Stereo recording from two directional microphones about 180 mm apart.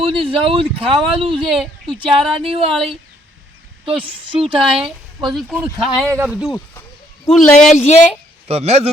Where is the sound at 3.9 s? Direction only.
30° right (ahead or behind).